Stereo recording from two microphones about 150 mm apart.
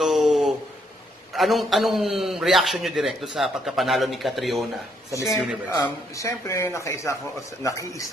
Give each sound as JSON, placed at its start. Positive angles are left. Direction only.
{"t": 0.0, "sound": "a sound", "side_deg": 0}
{"t": 1.3, "sound": "a man's voice", "side_deg": 0}
{"t": 5.7, "sound": "a man's voice", "side_deg": 20}